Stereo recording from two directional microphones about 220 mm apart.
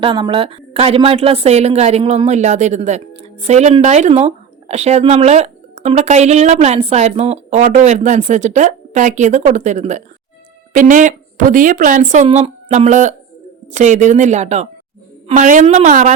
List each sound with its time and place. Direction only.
0.0 s a woman's voice: 20° right (ahead or behind)